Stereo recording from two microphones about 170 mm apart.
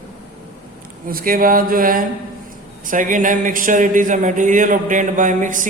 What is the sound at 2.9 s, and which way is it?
Speech, 50° right (ahead or behind).